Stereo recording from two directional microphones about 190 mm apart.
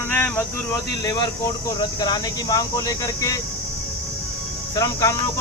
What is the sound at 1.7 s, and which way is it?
Speech, 20° left (ahead or behind).